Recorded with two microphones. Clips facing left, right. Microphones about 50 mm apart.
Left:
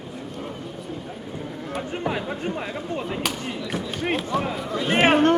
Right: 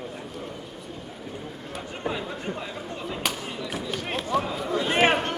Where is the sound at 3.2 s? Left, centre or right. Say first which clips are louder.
Left 2 dB; centre.